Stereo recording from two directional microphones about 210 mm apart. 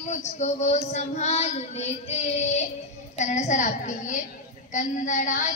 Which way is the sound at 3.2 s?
35° left (ahead or behind).